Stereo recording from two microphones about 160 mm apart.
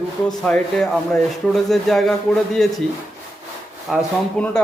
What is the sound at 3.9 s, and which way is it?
Speech, centre (ahead or behind).